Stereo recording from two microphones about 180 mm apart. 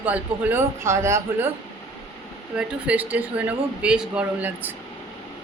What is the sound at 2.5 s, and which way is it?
Speech, 5° right (ahead or behind).